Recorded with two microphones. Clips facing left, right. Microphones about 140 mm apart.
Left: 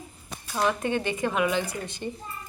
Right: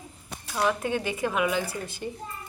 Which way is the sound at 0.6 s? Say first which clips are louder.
Left 1 dB; centre (ahead or behind).